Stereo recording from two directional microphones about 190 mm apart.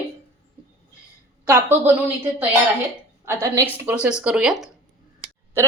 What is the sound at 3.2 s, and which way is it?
A woman's voice, 15° right (ahead or behind).